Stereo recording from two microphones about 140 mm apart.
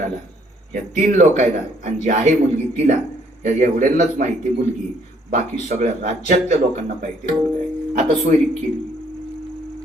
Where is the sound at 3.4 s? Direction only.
65° right (ahead or behind).